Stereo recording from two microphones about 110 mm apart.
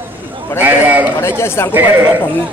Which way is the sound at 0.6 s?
15° right (ahead or behind).